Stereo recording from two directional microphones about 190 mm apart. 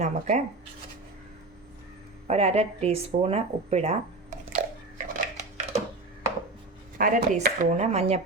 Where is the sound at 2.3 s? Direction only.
35° right (ahead or behind).